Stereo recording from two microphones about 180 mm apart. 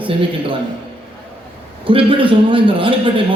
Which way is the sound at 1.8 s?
30° right (ahead or behind).